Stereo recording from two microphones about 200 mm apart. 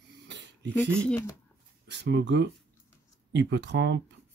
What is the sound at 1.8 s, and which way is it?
Speech, 60° right (ahead or behind).